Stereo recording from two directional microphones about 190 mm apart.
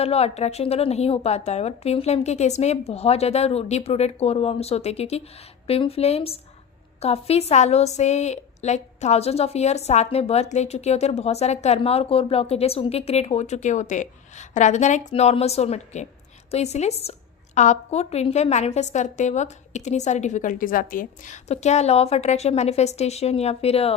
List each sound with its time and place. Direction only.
0.0 s a woman's voice: 30° left (ahead or behind)